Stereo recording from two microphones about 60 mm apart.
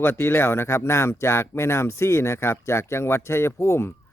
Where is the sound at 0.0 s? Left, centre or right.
Left.